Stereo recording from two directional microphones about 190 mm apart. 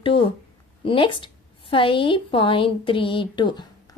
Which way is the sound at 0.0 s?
30° left (ahead or behind).